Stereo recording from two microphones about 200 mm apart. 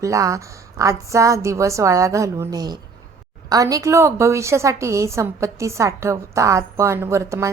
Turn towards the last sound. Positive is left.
turn(degrees=-15)  # may be behind; listen again after turning